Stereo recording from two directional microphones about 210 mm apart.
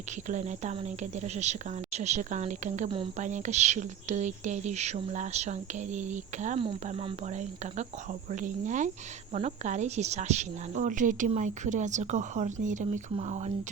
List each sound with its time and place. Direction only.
0.3 s speech: 35° right (ahead or behind)
8.3 s speech: 35° right (ahead or behind)